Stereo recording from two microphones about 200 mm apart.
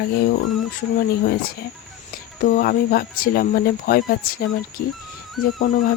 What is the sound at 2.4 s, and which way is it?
Speech, 50° left (ahead or behind).